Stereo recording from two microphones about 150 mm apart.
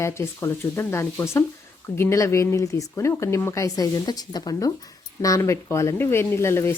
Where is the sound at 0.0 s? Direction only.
15° left (ahead or behind).